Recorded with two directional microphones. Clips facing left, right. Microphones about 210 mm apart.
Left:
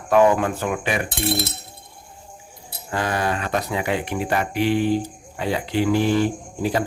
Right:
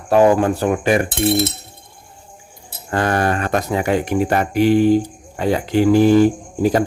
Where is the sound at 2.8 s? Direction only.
55° right (ahead or behind).